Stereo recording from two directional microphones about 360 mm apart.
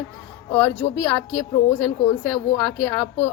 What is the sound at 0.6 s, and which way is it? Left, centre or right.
Speech, centre.